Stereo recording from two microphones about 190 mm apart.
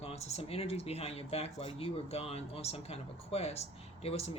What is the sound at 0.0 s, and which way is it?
Speech, 35° left (ahead or behind).